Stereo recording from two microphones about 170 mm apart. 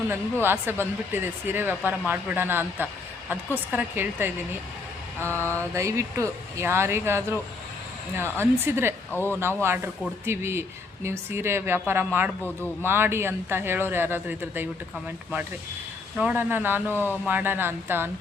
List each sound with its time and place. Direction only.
0.4 s speech: 15° right (ahead or behind)
5.3 s speech: 15° right (ahead or behind)
9.1 s speech: 10° left (ahead or behind)
9.6 s speech: 15° right (ahead or behind)
16.1 s speech: 10° right (ahead or behind)